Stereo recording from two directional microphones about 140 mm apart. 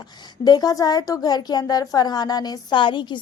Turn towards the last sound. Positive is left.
turn(degrees=35)  # may be behind; listen again after turning